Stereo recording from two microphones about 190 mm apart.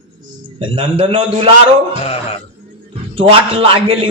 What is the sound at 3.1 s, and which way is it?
Speech, 30° right (ahead or behind).